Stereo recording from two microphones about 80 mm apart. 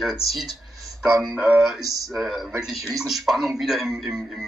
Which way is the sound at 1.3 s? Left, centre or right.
Centre.